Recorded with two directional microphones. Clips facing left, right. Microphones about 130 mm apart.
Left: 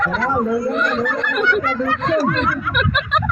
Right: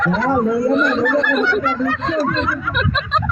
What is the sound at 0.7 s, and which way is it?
Speech, 25° right (ahead or behind).